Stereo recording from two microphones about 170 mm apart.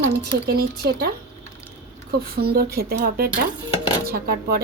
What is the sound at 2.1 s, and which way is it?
Speech, 65° right (ahead or behind).